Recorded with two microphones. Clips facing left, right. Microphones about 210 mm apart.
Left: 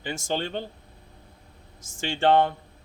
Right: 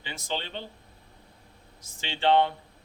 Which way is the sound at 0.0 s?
50° left (ahead or behind).